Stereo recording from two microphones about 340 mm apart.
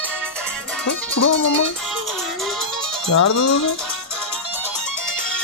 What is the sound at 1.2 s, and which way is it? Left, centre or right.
Music, left.